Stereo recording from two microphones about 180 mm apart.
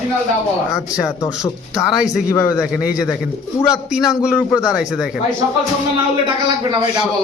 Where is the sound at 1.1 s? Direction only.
20° left (ahead or behind).